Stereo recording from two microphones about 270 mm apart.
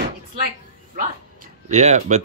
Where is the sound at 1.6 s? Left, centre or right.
Right.